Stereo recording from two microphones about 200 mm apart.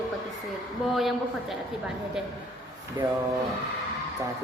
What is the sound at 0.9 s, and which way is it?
Speech, centre (ahead or behind).